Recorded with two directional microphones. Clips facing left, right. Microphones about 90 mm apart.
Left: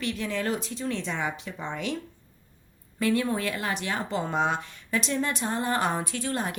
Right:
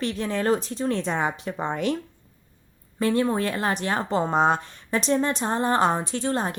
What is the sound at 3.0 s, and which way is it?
A woman's voice, 35° right (ahead or behind).